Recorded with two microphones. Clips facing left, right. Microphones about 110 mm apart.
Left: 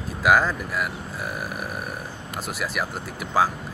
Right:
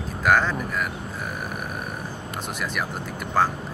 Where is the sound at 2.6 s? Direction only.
5° left (ahead or behind).